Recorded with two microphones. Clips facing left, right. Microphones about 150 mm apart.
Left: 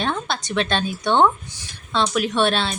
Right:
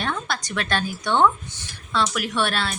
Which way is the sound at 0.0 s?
25° left (ahead or behind).